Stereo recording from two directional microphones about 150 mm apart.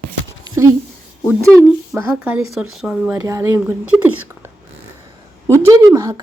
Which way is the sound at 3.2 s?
20° right (ahead or behind).